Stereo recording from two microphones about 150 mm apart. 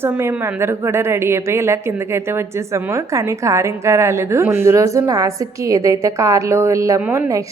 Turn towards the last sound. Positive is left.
turn(degrees=-10)  # may be behind; listen again after turning